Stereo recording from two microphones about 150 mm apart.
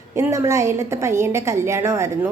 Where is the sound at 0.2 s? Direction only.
20° right (ahead or behind).